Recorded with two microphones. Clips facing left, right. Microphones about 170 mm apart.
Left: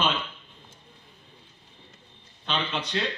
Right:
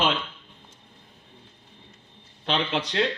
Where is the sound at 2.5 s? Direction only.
90° right.